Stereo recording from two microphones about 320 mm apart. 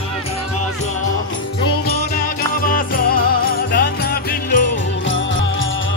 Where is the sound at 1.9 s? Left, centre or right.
Left.